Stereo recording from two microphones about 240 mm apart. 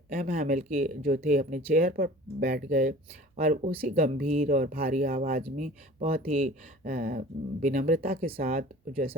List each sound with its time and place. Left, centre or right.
0.1 s speech: right